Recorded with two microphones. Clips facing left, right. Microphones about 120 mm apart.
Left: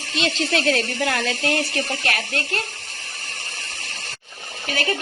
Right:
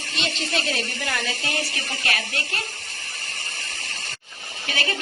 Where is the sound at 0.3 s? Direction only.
75° left (ahead or behind); by 2.4 s 50° left (ahead or behind).